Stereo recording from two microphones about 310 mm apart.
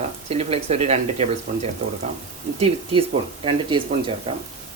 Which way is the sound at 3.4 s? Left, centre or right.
Centre.